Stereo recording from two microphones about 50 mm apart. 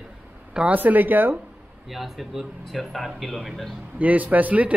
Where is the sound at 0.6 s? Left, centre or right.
Right.